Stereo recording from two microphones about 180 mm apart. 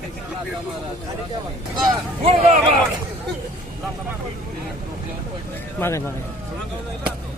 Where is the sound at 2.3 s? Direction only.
35° right (ahead or behind).